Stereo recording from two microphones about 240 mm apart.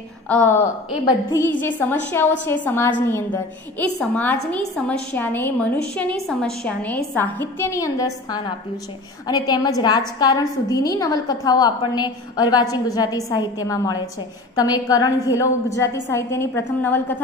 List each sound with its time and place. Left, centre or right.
0.3 s a woman's voice: centre